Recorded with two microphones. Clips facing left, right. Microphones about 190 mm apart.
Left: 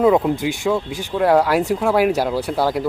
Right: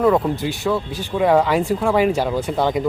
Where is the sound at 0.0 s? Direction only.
15° left (ahead or behind).